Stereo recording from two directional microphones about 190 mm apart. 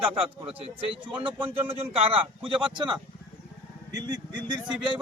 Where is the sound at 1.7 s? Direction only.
30° right (ahead or behind).